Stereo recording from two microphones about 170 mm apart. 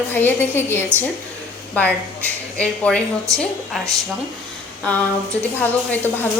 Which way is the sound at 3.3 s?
20° right (ahead or behind).